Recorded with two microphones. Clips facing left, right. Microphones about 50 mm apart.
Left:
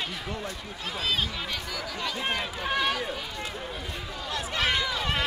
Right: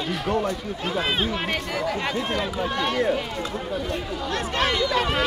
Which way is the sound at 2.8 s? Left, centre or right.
Right.